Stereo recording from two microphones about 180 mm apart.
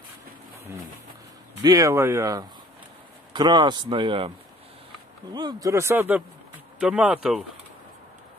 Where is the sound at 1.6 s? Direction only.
20° right (ahead or behind).